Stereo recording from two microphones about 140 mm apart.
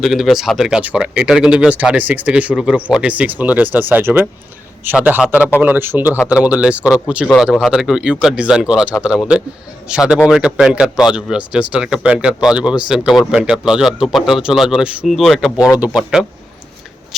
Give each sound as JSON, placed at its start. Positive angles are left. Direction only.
{"t": 0.0, "sound": "speech", "side_deg": 0}
{"t": 15.5, "sound": "speech", "side_deg": 25}
{"t": 15.8, "sound": "speech", "side_deg": -5}